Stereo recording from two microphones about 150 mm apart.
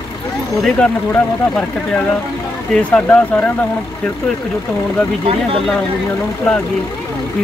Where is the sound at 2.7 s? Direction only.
5° left (ahead or behind).